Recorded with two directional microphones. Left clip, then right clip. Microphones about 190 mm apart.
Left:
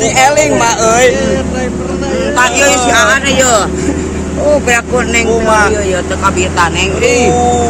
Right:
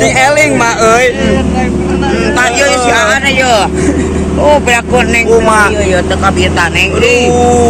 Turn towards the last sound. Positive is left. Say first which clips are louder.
# right 2 dB
turn(degrees=40)  # may be behind; listen again after turning